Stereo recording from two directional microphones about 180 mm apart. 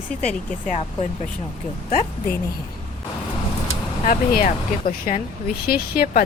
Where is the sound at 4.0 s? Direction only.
50° left (ahead or behind).